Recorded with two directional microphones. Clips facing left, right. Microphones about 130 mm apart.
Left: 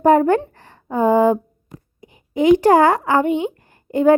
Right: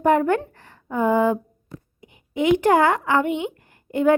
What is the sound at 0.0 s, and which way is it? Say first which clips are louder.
A woman's voice: left 5 dB; 35° left (ahead or behind).